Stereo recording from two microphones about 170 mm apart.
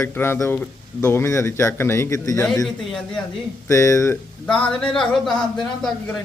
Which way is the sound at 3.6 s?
15° left (ahead or behind).